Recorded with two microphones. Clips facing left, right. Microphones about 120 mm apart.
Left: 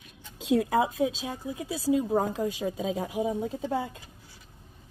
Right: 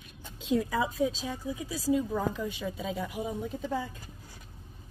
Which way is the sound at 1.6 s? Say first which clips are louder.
Left 3 dB; 75° left (ahead or behind).